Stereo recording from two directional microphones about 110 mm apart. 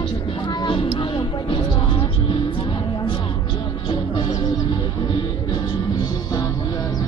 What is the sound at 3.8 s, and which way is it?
Music, 50° left (ahead or behind).